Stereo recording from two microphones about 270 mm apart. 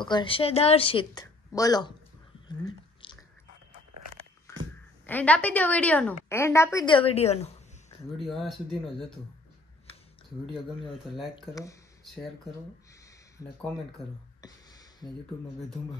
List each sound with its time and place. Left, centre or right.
0.0 s a woman's voice: centre
2.4 s a sound: centre
5.0 s a woman's voice: centre; by 7.5 s left
8.2 s speech: centre
11.3 s a woman's voice: centre
14.4 s a sound: centre